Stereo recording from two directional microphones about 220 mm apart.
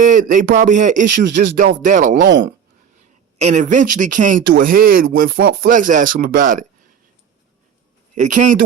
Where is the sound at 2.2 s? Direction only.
55° right (ahead or behind).